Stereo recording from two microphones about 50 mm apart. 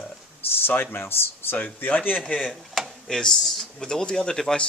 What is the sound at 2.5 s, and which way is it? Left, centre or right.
Speech, centre.